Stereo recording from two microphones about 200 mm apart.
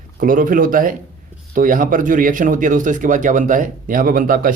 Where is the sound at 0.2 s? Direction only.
45° right (ahead or behind).